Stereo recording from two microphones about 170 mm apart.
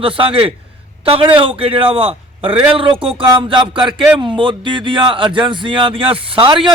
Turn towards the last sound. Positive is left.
turn(degrees=-30)  # may be behind; listen again after turning